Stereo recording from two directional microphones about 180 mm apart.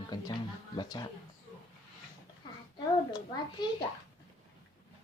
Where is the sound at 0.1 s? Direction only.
25° left (ahead or behind).